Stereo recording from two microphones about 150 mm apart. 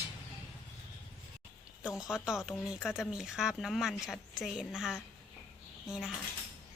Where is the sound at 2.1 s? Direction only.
5° right (ahead or behind).